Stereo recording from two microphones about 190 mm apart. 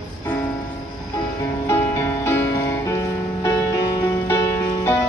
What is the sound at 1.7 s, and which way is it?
Music, 15° left (ahead or behind).